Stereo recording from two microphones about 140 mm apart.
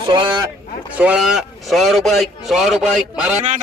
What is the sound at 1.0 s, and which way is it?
A man's voice, 5° right (ahead or behind).